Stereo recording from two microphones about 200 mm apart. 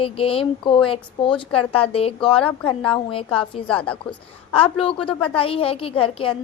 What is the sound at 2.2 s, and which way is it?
Speech, 5° left (ahead or behind).